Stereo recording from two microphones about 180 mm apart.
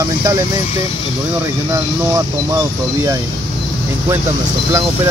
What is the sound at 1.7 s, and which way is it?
Speech, 15° right (ahead or behind).